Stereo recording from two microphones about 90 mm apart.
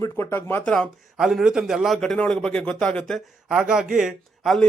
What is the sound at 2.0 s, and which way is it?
Speech, 10° left (ahead or behind).